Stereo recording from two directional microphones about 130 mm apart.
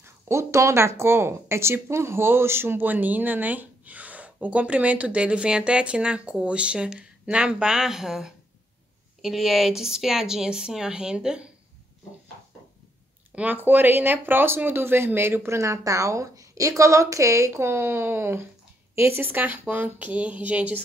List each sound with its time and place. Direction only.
0.0 s speech: 20° right (ahead or behind)
13.3 s speech: 10° right (ahead or behind)